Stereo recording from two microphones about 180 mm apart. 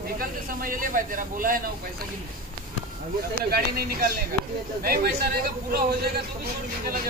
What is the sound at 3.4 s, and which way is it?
Speech, 55° right (ahead or behind).